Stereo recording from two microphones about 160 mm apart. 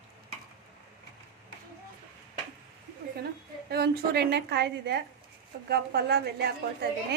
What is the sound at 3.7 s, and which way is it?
A woman's voice, 85° right.